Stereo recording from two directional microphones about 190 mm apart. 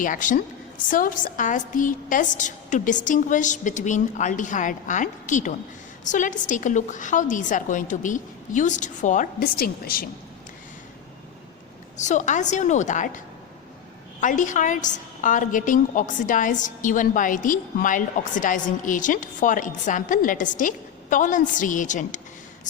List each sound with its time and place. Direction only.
0.0 s a woman's voice: 45° left (ahead or behind)
11.9 s a woman's voice: 40° left (ahead or behind)